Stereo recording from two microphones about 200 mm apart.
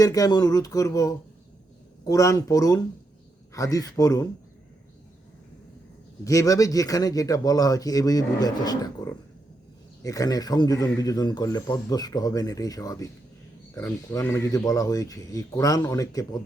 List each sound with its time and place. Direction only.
0.0 s a man's voice: 20° left (ahead or behind)
6.2 s a man's voice: 15° left (ahead or behind)